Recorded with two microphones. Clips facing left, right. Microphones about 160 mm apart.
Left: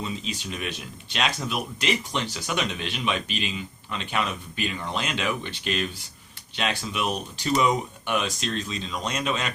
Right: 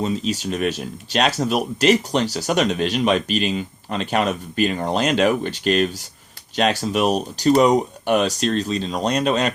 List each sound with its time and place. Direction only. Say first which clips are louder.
0.0 s speech: right 10 dB; 45° right (ahead or behind)